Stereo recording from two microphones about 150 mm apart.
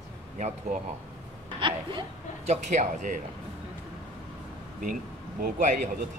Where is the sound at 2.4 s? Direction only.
50° right (ahead or behind).